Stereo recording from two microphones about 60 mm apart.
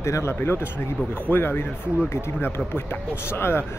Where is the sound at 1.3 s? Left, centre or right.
Left.